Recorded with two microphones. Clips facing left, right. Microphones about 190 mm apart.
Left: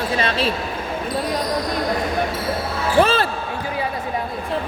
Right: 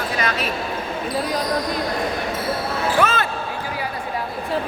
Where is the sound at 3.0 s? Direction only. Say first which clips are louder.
Left 2 dB; 30° left (ahead or behind).